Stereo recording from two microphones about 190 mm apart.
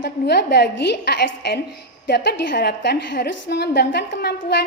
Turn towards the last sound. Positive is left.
turn(degrees=60)  # may be behind; listen again after turning